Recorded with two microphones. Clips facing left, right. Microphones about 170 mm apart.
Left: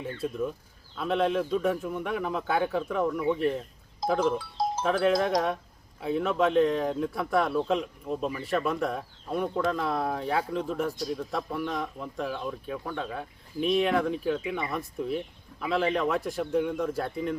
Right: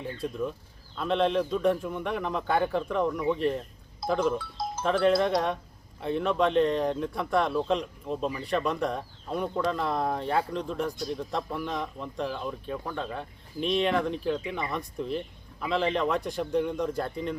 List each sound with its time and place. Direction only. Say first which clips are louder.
0.0 s speech: left 1 dB; 5° left (ahead or behind)
4.4 s livestock: left 4 dB; 35° left (ahead or behind)
4.8 s speech: right 2 dB; 5° left (ahead or behind)